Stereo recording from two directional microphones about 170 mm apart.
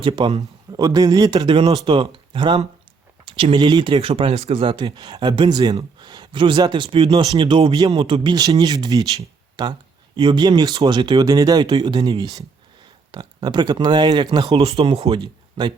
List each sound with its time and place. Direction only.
0.0 s a man's voice: 35° right (ahead or behind)
0.7 s speech: 20° right (ahead or behind)